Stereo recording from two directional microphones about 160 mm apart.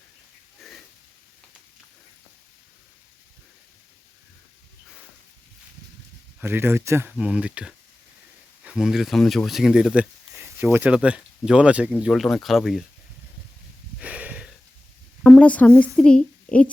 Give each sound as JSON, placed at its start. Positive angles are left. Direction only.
{"t": 0.6, "sound": "a sound", "side_deg": 0}
{"t": 6.4, "sound": "speech", "side_deg": -15}
{"t": 10.3, "sound": "a sound", "side_deg": -15}
{"t": 10.7, "sound": "speech", "side_deg": -10}
{"t": 14.0, "sound": "sniff", "side_deg": -10}
{"t": 15.2, "sound": "a woman's voice", "side_deg": 5}